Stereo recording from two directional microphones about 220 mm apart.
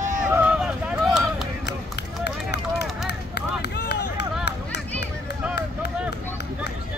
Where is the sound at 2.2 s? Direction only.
50° left (ahead or behind).